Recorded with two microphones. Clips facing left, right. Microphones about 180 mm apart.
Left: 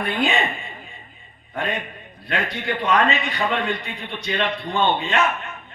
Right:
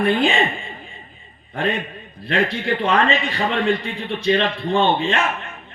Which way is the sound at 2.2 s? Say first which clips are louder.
Right 4 dB; 30° right (ahead or behind).